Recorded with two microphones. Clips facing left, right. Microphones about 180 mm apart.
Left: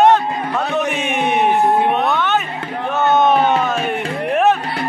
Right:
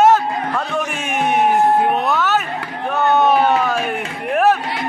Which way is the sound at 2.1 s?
Centre (ahead or behind).